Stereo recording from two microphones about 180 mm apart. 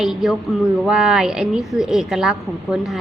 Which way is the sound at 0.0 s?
Centre (ahead or behind).